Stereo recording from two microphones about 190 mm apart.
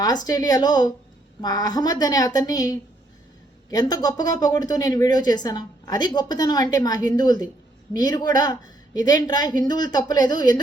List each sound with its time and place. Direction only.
0.0 s a woman's voice: 20° left (ahead or behind)